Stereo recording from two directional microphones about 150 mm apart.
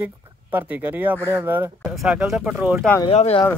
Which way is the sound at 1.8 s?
Centre (ahead or behind).